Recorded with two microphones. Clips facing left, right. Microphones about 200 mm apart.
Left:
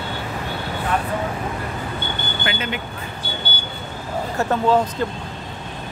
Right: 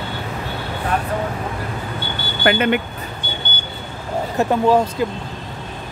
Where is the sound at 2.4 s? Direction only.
60° right (ahead or behind).